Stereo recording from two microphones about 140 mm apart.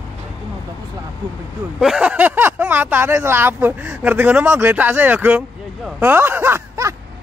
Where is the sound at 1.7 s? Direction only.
5° right (ahead or behind).